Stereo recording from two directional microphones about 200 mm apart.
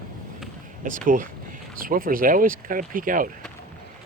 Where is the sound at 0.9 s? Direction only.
40° right (ahead or behind).